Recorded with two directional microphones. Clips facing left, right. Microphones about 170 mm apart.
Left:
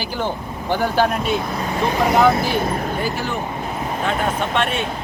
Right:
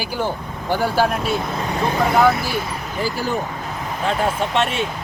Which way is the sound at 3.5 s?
25° left (ahead or behind).